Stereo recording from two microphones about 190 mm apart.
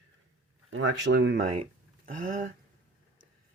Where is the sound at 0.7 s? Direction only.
70° right (ahead or behind).